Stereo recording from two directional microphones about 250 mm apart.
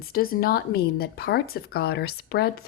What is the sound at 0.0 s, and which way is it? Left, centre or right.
Speech, left.